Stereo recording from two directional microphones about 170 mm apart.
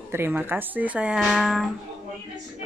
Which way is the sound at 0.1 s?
15° right (ahead or behind).